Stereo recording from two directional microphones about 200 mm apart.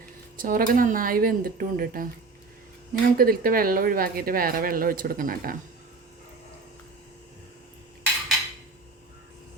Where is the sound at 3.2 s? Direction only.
45° right (ahead or behind).